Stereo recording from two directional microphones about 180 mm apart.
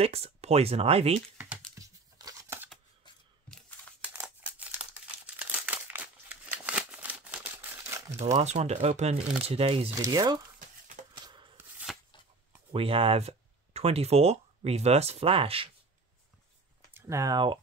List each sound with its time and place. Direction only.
0.0 s speech: 35° right (ahead or behind)
1.8 s tearing: 20° right (ahead or behind)
4.0 s scissors: 10° right (ahead or behind)
5.2 s crumpling: 10° right (ahead or behind)
8.4 s speech: 35° right (ahead or behind)
9.9 s speech: 20° right (ahead or behind)
11.1 s a sound: 25° right (ahead or behind)
11.5 s shuffling cards: centre (ahead or behind)
12.7 s speech: 30° right (ahead or behind)
16.9 s speech: 15° right (ahead or behind)